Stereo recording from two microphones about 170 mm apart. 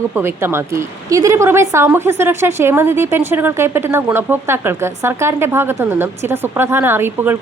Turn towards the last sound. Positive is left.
turn(degrees=-10)  # may be behind; listen again after turning